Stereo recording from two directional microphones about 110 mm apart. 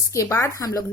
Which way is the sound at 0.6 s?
35° left (ahead or behind).